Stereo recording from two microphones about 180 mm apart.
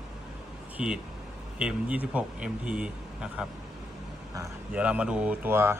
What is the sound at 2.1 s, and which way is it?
A man's voice, 5° right (ahead or behind).